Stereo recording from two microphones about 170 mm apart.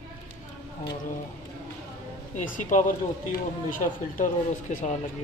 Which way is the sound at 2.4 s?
50° left (ahead or behind).